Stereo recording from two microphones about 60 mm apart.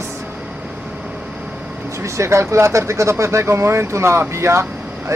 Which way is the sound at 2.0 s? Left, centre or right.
Right.